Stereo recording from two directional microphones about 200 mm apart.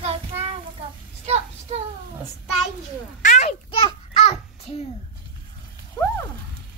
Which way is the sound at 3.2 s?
35° left (ahead or behind).